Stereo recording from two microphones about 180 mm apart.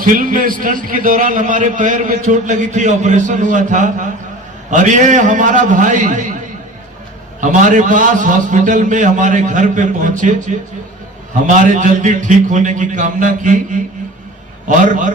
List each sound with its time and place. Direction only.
0.0 s a man's voice: 50° right (ahead or behind)
7.4 s a man's voice: 45° right (ahead or behind)
14.7 s a man's voice: 45° right (ahead or behind)